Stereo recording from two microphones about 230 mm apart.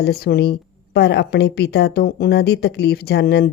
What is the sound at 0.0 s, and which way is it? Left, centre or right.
A woman's voice, left.